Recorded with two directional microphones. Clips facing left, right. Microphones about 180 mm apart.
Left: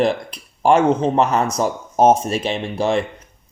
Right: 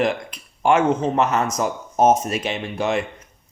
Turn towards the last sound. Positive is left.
turn(degrees=30)  # may be behind; listen again after turning